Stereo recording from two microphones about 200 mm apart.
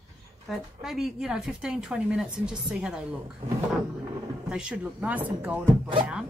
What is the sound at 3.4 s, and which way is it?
Speech, 25° right (ahead or behind).